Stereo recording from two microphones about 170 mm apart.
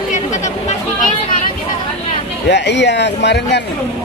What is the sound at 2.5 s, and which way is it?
Speech, 90° left.